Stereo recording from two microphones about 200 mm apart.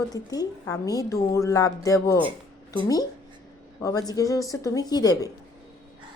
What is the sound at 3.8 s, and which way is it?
Speech, 20° left (ahead or behind).